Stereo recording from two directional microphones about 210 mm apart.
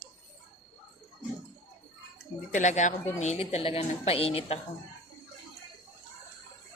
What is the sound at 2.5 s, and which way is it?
A woman's voice, 35° left (ahead or behind).